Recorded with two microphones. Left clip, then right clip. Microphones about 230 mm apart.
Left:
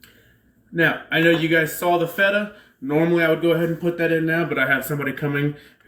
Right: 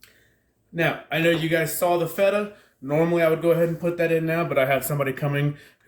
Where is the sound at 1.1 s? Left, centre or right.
Right.